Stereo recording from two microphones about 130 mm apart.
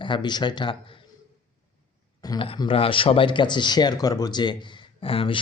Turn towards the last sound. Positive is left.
turn(degrees=45)  # may be behind; listen again after turning